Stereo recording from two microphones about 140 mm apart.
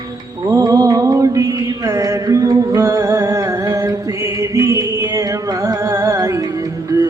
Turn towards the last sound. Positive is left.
turn(degrees=-25)  # may be behind; listen again after turning